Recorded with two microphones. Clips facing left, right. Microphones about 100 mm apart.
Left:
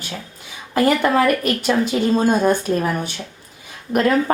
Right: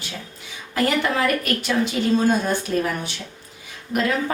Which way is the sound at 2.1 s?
45° left (ahead or behind).